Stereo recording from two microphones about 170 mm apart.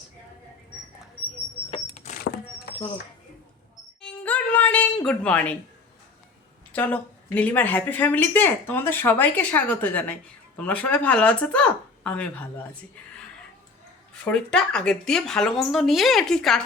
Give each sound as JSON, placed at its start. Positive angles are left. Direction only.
{"t": 1.7, "sound": "vehicle", "side_deg": 45}
{"t": 4.0, "sound": "music", "side_deg": 10}
{"t": 6.7, "sound": "speech", "side_deg": 10}
{"t": 14.1, "sound": "speech", "side_deg": 5}